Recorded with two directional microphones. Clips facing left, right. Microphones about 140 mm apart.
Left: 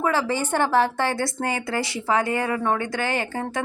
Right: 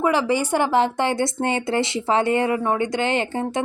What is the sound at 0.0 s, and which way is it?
Speech, 15° right (ahead or behind).